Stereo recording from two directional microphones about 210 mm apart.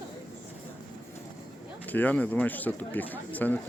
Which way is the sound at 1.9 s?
5° left (ahead or behind).